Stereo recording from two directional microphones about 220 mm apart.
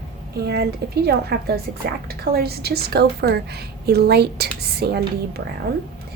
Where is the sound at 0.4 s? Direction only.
45° right (ahead or behind).